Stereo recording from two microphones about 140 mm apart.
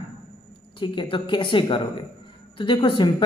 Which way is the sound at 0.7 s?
35° left (ahead or behind).